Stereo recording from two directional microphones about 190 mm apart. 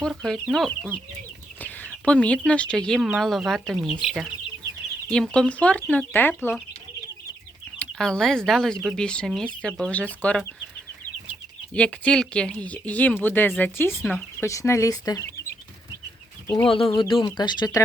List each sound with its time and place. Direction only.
0.0 s speech: centre (ahead or behind)
7.8 s speech: 5° left (ahead or behind)
11.7 s speech: 5° left (ahead or behind)
16.6 s speech: 30° left (ahead or behind)